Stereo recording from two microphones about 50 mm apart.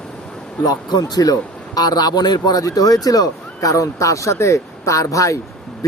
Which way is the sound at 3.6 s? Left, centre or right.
Left.